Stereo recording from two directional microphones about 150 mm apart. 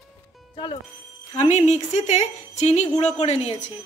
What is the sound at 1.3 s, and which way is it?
Speech, 50° left (ahead or behind).